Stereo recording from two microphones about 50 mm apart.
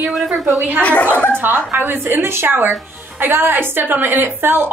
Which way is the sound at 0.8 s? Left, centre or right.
Left.